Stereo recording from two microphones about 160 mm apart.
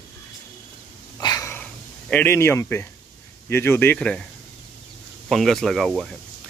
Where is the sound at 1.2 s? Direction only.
25° left (ahead or behind).